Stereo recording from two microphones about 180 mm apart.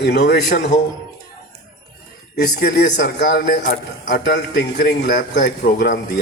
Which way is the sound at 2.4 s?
60° left (ahead or behind).